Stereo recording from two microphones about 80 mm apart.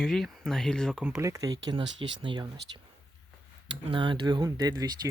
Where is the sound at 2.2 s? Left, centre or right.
Right.